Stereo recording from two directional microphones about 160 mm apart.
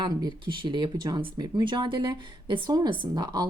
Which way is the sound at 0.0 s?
25° right (ahead or behind).